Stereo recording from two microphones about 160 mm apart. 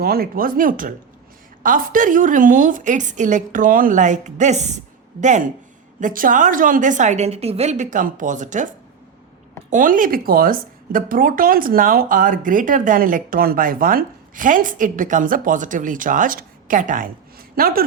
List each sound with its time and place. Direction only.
0.0 s a woman's voice: 70° right (ahead or behind)